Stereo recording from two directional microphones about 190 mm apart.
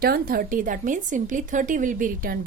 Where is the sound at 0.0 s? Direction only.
50° right (ahead or behind).